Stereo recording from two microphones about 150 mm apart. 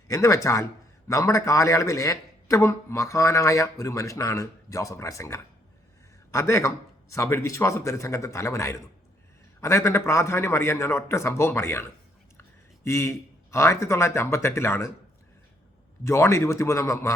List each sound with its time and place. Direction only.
0.1 s a man's voice: 20° left (ahead or behind)
16.0 s speech: 20° left (ahead or behind)